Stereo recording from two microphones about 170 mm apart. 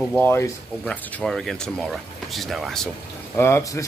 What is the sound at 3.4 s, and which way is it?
Speech, 15° left (ahead or behind).